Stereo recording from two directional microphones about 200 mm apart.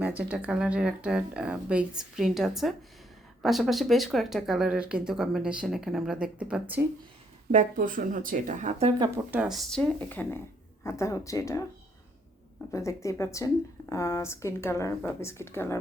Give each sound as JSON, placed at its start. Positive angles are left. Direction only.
{"t": 0.0, "sound": "speech", "side_deg": -5}
{"t": 7.5, "sound": "speech", "side_deg": -40}
{"t": 9.0, "sound": "speech", "side_deg": -10}
{"t": 12.7, "sound": "speech", "side_deg": 15}